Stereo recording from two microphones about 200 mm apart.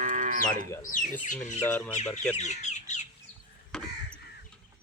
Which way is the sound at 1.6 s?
10° left (ahead or behind).